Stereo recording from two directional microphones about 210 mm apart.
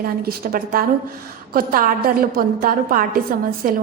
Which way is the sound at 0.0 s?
45° right (ahead or behind).